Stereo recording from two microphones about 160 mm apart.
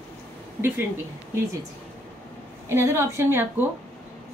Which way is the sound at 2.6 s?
15° right (ahead or behind).